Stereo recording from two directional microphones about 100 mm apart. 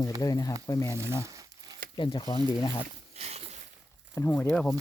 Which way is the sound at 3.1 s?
90° right.